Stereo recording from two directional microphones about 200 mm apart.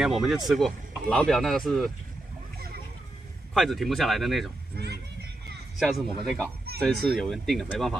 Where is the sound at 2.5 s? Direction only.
50° right (ahead or behind).